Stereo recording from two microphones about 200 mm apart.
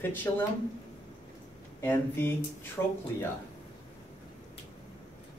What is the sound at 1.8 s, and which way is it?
Speech, 10° left (ahead or behind).